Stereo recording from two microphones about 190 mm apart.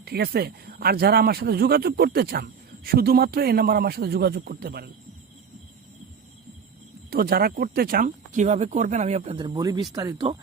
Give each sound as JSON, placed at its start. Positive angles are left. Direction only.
{"t": 0.0, "sound": "speech", "side_deg": -60}
{"t": 7.1, "sound": "speech", "side_deg": -55}